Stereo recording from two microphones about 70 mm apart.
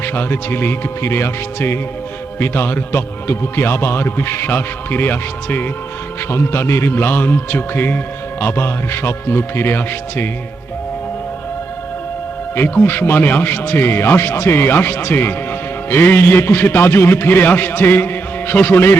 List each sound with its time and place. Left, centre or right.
0.0 s a man's voice: left
12.5 s a man's voice: left